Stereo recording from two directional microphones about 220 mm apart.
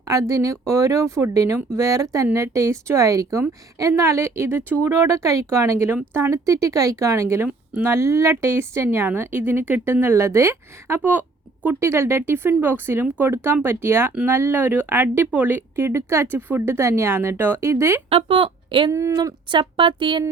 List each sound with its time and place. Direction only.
0.1 s speech: 15° right (ahead or behind)
18.1 s a woman's voice: 25° right (ahead or behind)
18.9 s a sound: 10° right (ahead or behind)